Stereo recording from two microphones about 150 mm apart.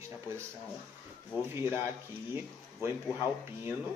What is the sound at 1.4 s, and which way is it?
Speech, 15° right (ahead or behind).